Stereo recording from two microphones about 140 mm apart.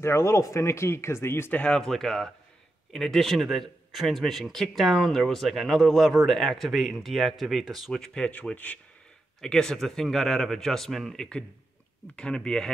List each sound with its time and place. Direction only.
0.0 s speech: 20° left (ahead or behind)